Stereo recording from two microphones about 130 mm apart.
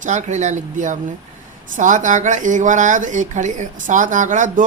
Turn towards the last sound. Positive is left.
turn(degrees=-75)  # may be behind; listen again after turning